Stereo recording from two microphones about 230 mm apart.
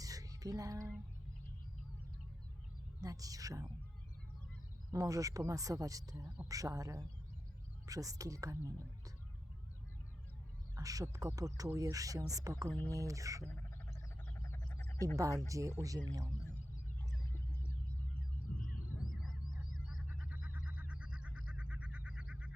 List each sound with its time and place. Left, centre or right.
0.0 s music: centre
3.0 s speech: centre
4.9 s speech: centre
10.8 s speech: centre
12.6 s speech: centre
12.9 s speech: centre
13.9 s frog: centre
15.0 s speech: centre
17.0 s a sound: centre
18.6 s a sound: left
19.9 s a sound: centre